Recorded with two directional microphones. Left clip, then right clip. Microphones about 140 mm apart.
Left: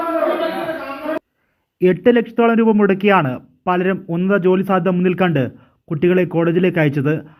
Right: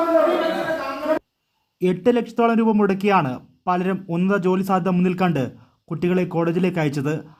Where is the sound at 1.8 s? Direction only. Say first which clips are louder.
Left 6 dB; 20° left (ahead or behind).